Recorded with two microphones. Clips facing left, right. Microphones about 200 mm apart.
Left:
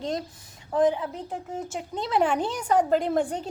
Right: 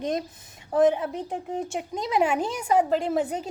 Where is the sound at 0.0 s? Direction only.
20° right (ahead or behind).